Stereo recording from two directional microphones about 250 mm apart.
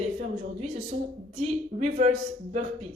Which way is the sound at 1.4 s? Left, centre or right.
Right.